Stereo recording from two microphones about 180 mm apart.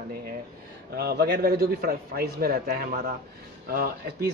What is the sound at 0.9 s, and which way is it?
A man's voice, 60° right (ahead or behind).